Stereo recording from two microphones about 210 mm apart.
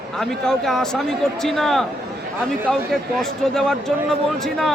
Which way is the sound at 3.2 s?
Centre (ahead or behind).